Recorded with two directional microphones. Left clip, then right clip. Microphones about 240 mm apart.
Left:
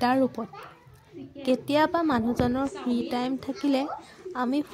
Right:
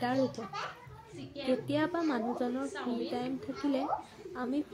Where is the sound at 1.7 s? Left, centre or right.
Left.